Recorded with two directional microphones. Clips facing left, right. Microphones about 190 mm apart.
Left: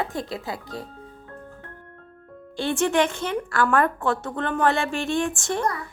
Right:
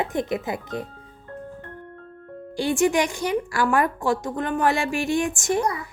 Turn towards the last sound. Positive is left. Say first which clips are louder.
# right 2 dB
turn(degrees=-15)  # may be behind; listen again after turning